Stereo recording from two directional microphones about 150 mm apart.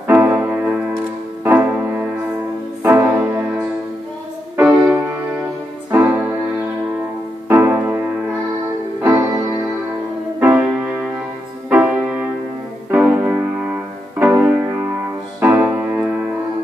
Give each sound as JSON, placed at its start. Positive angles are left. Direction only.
{"t": 0.0, "sound": "music", "side_deg": -10}
{"t": 4.6, "sound": "music", "side_deg": -15}
{"t": 7.4, "sound": "keyboard", "side_deg": -15}
{"t": 10.4, "sound": "music", "side_deg": -10}
{"t": 11.7, "sound": "music", "side_deg": -10}